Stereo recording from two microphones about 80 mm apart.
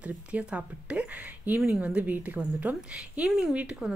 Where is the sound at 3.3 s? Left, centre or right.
Centre.